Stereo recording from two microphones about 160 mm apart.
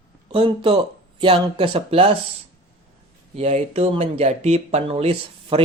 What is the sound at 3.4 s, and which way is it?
Speech, 40° right (ahead or behind).